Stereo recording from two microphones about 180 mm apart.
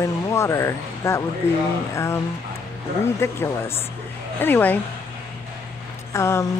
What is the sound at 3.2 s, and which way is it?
Speech, 15° left (ahead or behind).